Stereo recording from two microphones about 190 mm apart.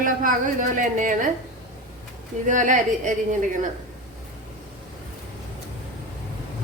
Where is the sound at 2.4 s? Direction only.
45° right (ahead or behind).